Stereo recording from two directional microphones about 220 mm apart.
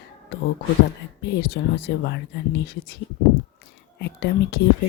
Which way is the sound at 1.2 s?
50° left (ahead or behind).